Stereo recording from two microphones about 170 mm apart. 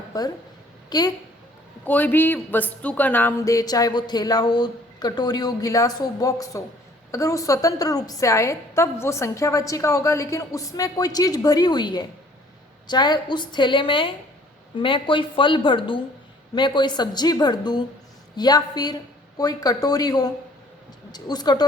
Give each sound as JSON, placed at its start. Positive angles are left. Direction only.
{"t": 0.1, "sound": "a woman's voice", "side_deg": 20}
{"t": 1.8, "sound": "a woman's voice", "side_deg": 10}